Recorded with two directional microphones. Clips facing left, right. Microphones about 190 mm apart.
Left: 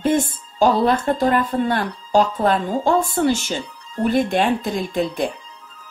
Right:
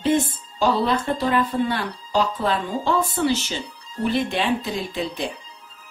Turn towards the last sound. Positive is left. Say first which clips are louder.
# left 5 dB
turn(degrees=50)  # may be behind; listen again after turning